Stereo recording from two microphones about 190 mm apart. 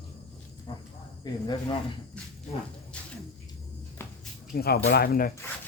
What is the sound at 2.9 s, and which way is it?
Speech, 5° left (ahead or behind).